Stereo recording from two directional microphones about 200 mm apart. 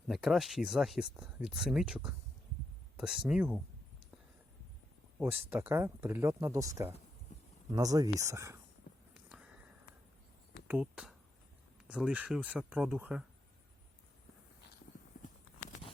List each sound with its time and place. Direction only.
0.1 s speech: centre (ahead or behind)
5.2 s speech: 10° right (ahead or behind)
10.7 s speech: 5° right (ahead or behind)